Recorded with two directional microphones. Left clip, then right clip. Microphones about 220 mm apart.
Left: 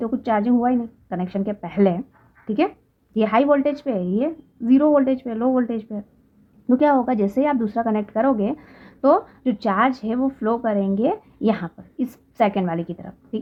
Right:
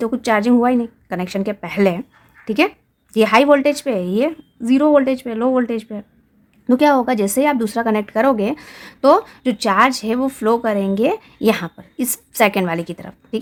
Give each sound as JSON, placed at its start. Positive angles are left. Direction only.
{"t": 0.0, "sound": "a woman's voice", "side_deg": -25}